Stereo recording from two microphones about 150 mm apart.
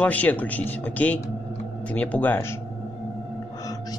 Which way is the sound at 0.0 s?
10° left (ahead or behind).